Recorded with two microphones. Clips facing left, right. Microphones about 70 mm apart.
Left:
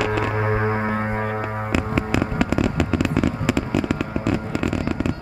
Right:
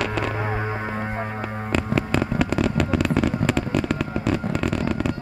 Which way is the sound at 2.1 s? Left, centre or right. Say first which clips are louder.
Left 2 dB; centre.